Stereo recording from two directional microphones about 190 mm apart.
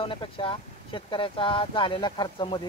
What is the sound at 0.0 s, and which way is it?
Speech, 25° left (ahead or behind).